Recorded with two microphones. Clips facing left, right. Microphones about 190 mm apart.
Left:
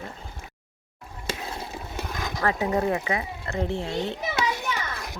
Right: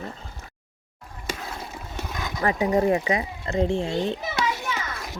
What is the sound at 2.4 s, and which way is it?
Speech, 15° right (ahead or behind).